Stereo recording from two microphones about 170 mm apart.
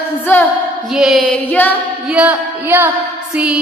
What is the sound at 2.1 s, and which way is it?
Music, 10° right (ahead or behind).